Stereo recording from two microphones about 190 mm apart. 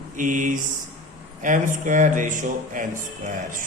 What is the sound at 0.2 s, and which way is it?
Speech, 45° right (ahead or behind).